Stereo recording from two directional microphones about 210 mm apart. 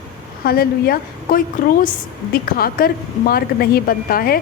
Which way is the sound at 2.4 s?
45° left (ahead or behind).